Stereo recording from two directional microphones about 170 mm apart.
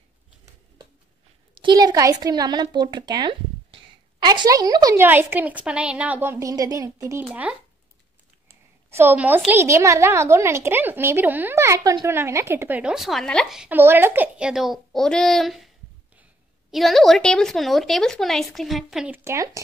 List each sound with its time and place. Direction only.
1.5 s a woman's voice: 30° right (ahead or behind)
7.2 s a woman's voice: 5° right (ahead or behind)
8.5 s a sound: 15° right (ahead or behind)
9.6 s a woman's voice: 15° right (ahead or behind); by 15.7 s centre (ahead or behind)
16.7 s speech: centre (ahead or behind); by 19.6 s 20° right (ahead or behind)